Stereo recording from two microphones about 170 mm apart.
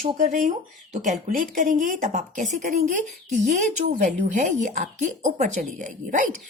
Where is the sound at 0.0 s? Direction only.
50° right (ahead or behind).